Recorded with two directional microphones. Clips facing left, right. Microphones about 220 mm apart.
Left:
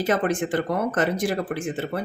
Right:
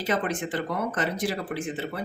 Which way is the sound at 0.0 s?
50° left (ahead or behind).